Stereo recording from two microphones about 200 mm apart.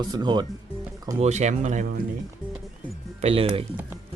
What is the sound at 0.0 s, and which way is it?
Speech, 20° right (ahead or behind).